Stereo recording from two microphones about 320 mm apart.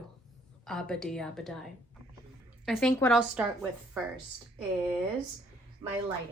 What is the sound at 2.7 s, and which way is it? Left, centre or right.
Speech, centre.